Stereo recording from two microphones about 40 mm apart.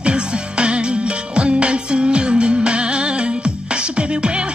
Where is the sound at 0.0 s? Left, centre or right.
Right.